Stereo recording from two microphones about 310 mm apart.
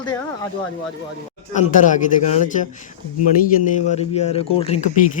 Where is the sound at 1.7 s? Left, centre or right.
Left.